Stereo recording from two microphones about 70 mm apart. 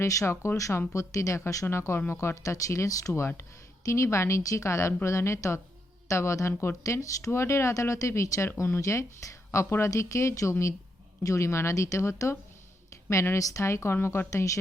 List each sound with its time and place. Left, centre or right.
0.0 s speech: left
1.6 s speech: left